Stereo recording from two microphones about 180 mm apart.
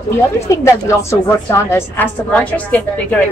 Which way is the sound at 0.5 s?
15° left (ahead or behind).